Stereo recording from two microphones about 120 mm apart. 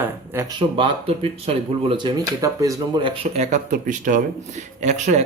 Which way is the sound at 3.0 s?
55° right (ahead or behind).